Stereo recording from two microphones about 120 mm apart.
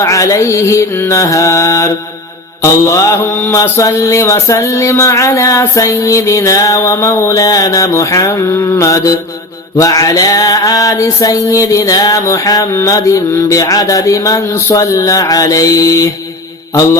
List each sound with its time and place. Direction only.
0.0 s mantra: 25° left (ahead or behind)